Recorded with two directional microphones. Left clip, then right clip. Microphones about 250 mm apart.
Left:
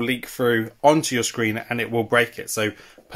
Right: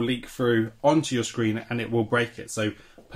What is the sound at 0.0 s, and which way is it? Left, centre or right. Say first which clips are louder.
Speech: left 4 dB; left.